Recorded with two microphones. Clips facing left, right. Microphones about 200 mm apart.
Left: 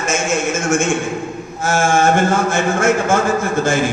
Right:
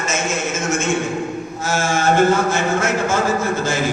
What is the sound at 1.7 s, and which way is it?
A man's voice, 50° left (ahead or behind).